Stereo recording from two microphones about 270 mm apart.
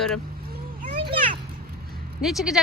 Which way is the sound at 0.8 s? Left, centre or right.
Centre.